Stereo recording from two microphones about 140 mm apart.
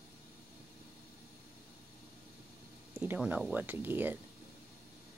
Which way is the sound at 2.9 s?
10° right (ahead or behind).